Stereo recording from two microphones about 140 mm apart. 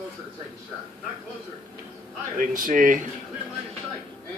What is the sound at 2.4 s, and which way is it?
Speech, 70° right (ahead or behind).